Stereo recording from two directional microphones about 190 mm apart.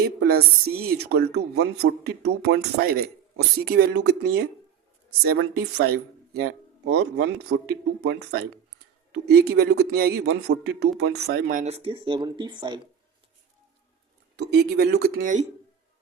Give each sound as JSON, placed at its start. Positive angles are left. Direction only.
{"t": 0.0, "sound": "speech", "side_deg": -55}
{"t": 11.6, "sound": "speech", "side_deg": -30}
{"t": 14.3, "sound": "speech", "side_deg": -60}